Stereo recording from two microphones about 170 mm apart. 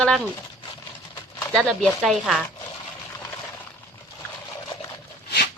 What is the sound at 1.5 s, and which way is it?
Speech, centre (ahead or behind).